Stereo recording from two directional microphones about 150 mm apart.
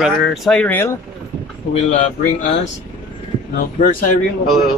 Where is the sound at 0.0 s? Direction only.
Centre (ahead or behind).